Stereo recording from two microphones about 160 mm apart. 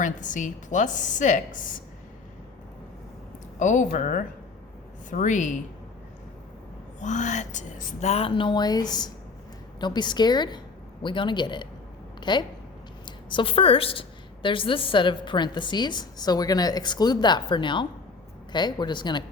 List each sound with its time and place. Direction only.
0.0 s a woman's voice: 50° left (ahead or behind)
3.6 s a woman's voice: 50° left (ahead or behind)
7.0 s a woman's voice: 50° left (ahead or behind)
8.1 s a woman's voice: 35° left (ahead or behind)